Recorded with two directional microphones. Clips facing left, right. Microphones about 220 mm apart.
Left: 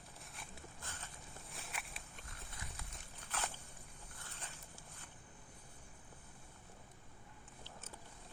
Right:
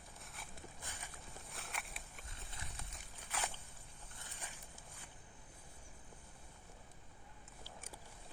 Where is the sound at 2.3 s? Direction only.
25° right (ahead or behind).